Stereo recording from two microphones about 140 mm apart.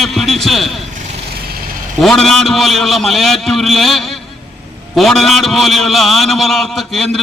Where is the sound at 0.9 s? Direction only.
60° right (ahead or behind).